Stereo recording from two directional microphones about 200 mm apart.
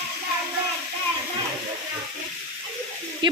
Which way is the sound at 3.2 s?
25° right (ahead or behind).